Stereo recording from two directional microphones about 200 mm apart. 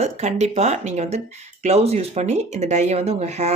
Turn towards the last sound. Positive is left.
turn(degrees=-35)  # may be behind; listen again after turning